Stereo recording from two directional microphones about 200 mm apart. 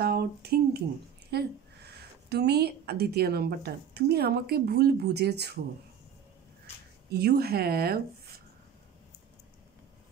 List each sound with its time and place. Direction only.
0.0 s a sound: 50° right (ahead or behind)
1.3 s a woman's voice: 55° right (ahead or behind)
7.1 s speech: 50° right (ahead or behind)